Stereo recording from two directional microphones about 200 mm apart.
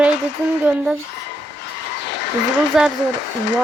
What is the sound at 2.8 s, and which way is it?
Speech, centre (ahead or behind).